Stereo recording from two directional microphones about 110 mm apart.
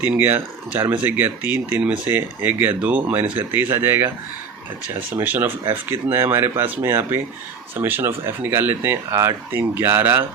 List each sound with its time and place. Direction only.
0.0 s speech: 15° right (ahead or behind)
5.1 s speech: 20° right (ahead or behind)